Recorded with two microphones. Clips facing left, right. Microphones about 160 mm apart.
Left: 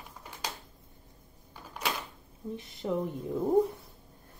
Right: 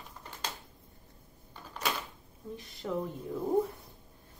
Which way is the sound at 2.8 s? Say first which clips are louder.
Left 3 dB; 20° left (ahead or behind).